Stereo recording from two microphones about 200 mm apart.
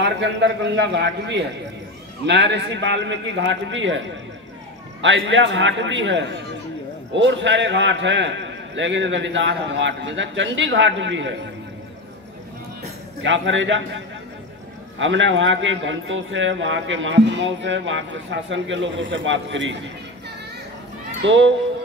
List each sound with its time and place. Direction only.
0.0 s a man's voice: 60° right (ahead or behind)
5.0 s a man's voice: 75° right (ahead or behind)
13.2 s a man's voice: 70° right (ahead or behind)
21.2 s speech: 65° right (ahead or behind)